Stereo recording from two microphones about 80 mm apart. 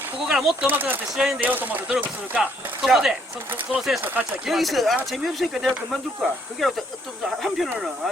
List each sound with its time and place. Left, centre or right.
0.2 s speech: centre
0.7 s speech: right
1.1 s speech: centre
1.4 s speech: right
2.8 s speech: centre